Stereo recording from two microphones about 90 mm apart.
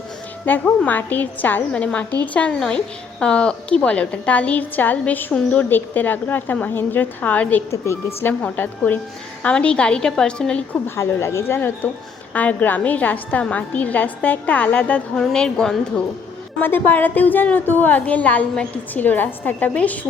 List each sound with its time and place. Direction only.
0.4 s a woman's voice: 20° left (ahead or behind)
7.7 s a woman's voice: 30° left (ahead or behind)
8.3 s a woman's voice: 20° left (ahead or behind)
10.8 s a woman's voice: 30° left (ahead or behind); by 16.0 s 5° left (ahead or behind)
16.6 s a woman's voice: 20° left (ahead or behind)